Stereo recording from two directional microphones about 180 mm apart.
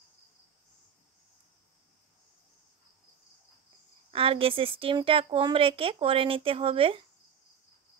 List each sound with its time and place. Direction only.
4.1 s a woman's voice: 30° right (ahead or behind)